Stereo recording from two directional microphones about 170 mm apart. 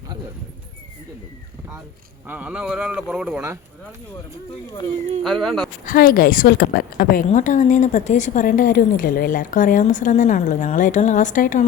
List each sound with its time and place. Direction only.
2.2 s a man's voice: 10° right (ahead or behind)
5.2 s speech: centre (ahead or behind)
5.8 s a woman's voice: 55° left (ahead or behind)